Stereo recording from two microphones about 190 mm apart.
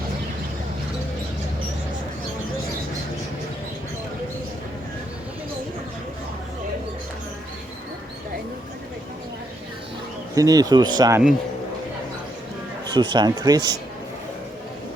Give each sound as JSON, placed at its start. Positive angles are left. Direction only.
{"t": 10.3, "sound": "speech", "side_deg": -20}
{"t": 12.9, "sound": "speech", "side_deg": -25}